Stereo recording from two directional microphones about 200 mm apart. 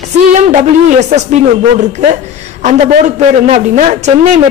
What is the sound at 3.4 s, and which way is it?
Speech, 35° right (ahead or behind).